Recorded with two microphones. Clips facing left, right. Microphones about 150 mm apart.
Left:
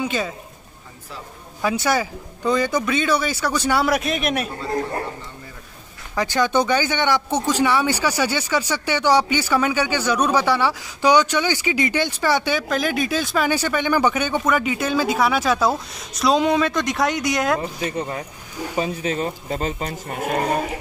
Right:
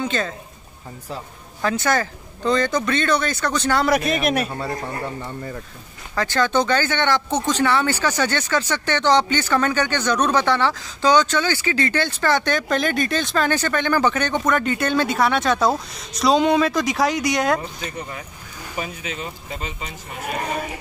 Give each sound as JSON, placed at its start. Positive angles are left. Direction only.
{"t": 0.0, "sound": "speech", "side_deg": 10}
{"t": 1.6, "sound": "speech", "side_deg": 10}
{"t": 6.1, "sound": "speech", "side_deg": 15}
{"t": 17.9, "sound": "speech", "side_deg": 35}